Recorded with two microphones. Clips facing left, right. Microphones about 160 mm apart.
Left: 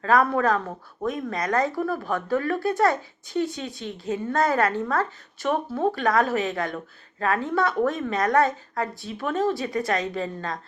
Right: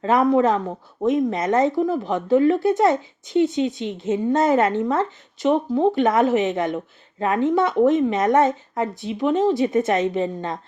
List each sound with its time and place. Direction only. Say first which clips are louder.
0.0 s speech: right 4 dB; 20° right (ahead or behind)